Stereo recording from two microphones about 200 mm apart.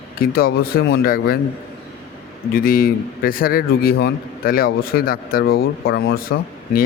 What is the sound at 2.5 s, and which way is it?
A man's voice, 45° left (ahead or behind).